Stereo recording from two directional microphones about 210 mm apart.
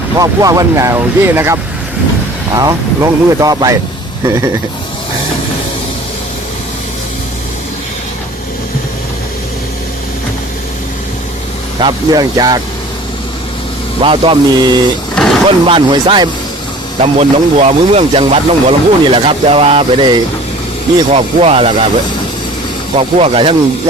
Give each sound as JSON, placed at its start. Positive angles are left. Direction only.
{"t": 0.2, "sound": "speech", "side_deg": -15}
{"t": 2.6, "sound": "speech", "side_deg": -15}
{"t": 11.8, "sound": "speech", "side_deg": -20}
{"t": 14.0, "sound": "speech", "side_deg": -25}
{"t": 15.1, "sound": "a sound", "side_deg": 0}
{"t": 15.4, "sound": "speech", "side_deg": -25}
{"t": 23.0, "sound": "speech", "side_deg": -30}